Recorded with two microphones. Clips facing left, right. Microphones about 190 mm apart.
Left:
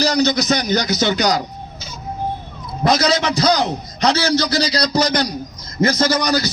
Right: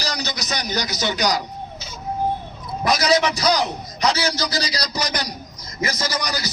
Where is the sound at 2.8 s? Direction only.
25° left (ahead or behind).